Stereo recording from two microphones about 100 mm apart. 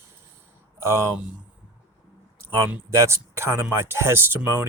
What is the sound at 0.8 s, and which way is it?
Speech, 30° right (ahead or behind).